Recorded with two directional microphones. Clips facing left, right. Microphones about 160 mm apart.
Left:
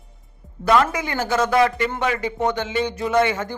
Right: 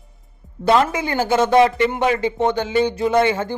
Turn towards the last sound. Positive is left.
turn(degrees=-30)  # may be behind; listen again after turning